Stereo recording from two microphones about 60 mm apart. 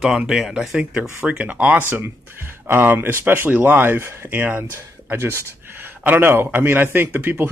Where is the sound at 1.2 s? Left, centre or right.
Right.